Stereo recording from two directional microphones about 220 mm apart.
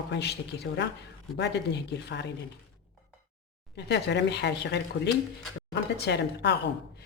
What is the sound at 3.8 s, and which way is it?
Speech, 50° left (ahead or behind).